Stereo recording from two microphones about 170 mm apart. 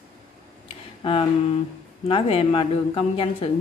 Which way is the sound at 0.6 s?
35° left (ahead or behind).